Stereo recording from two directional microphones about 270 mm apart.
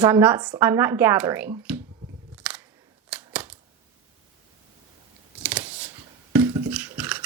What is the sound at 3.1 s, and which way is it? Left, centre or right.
Typewriter, centre.